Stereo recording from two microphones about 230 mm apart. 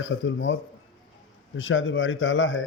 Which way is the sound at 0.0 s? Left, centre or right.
Left.